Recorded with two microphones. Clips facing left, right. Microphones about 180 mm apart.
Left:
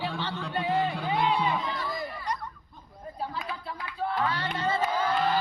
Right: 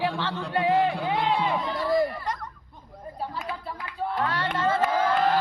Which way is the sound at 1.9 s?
85° right.